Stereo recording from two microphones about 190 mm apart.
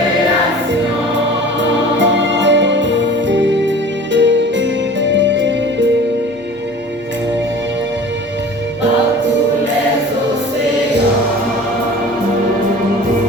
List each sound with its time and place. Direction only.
2.0 s music: 70° right (ahead or behind)